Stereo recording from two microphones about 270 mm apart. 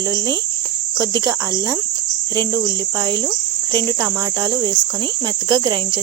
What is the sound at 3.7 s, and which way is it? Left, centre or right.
Speech, centre.